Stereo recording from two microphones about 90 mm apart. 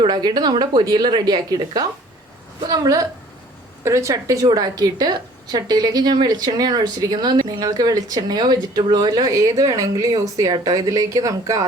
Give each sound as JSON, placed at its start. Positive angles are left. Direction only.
{"t": 0.0, "sound": "a woman's voice", "side_deg": -50}